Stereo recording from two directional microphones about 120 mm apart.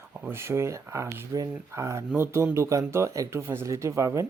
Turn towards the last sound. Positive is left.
turn(degrees=-25)  # may be behind; listen again after turning